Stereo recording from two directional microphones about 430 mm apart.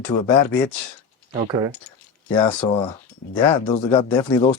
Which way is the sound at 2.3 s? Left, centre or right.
Centre.